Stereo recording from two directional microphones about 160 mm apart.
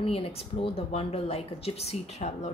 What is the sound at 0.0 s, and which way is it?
A woman's voice, 35° left (ahead or behind).